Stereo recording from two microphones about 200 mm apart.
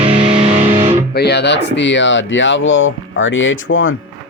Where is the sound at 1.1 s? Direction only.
55° left (ahead or behind); by 3.9 s 75° left (ahead or behind).